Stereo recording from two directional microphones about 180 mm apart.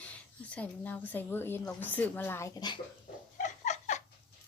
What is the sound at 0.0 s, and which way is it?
Speech, 5° left (ahead or behind).